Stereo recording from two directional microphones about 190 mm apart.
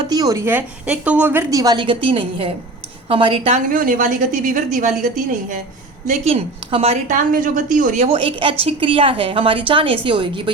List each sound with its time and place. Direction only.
0.1 s a woman's voice: 20° right (ahead or behind)
3.7 s a woman's voice: 45° right (ahead or behind)
6.1 s a woman's voice: 30° right (ahead or behind)